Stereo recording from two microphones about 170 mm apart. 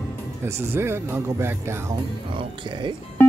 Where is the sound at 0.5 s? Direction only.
15° right (ahead or behind).